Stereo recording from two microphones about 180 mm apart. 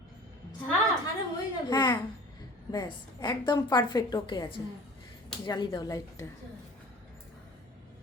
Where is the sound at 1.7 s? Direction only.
25° left (ahead or behind).